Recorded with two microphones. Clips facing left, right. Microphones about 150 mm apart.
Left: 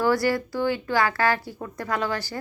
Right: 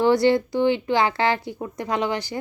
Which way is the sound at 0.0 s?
20° right (ahead or behind).